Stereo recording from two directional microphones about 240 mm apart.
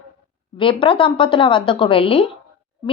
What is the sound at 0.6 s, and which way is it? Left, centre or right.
A woman's voice, left.